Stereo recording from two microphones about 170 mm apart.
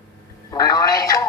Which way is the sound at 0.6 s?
20° left (ahead or behind).